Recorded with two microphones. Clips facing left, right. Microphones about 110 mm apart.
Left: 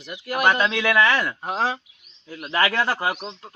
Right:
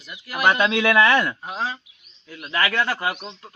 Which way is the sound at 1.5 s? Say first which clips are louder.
Left 4 dB; 75° left (ahead or behind).